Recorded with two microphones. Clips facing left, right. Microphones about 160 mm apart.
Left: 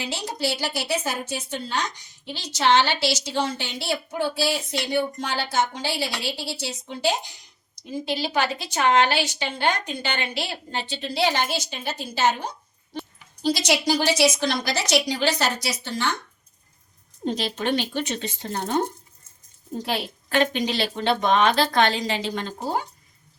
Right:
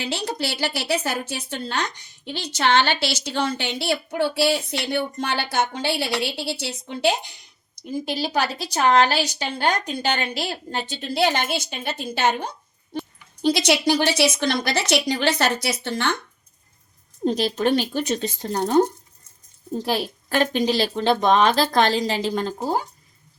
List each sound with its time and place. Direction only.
0.0 s a woman's voice: 65° right (ahead or behind)
8.0 s a woman's voice: 45° right (ahead or behind)
17.2 s speech: 40° right (ahead or behind)
19.8 s speech: 40° right (ahead or behind)